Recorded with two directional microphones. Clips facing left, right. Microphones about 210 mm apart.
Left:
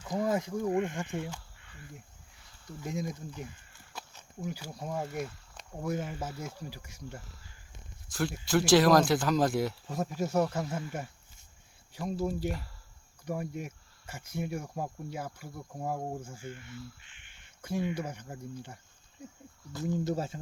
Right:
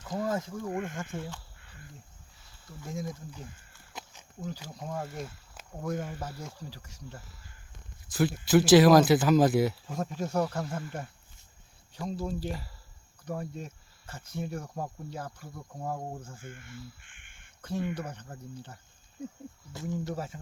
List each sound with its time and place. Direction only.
0.0 s speech: 15° left (ahead or behind)
2.8 s speech: 15° left (ahead or behind)
3.9 s walk: 15° right (ahead or behind)
4.4 s speech: 10° left (ahead or behind)
8.1 s speech: 5° right (ahead or behind)
16.5 s speech: 50° right (ahead or behind)
17.0 s quack: 50° right (ahead or behind)
17.6 s speech: 10° left (ahead or behind)
20.1 s speech: 25° left (ahead or behind)